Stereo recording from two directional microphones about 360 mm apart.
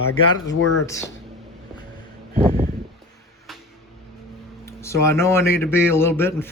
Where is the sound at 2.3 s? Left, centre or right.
Centre.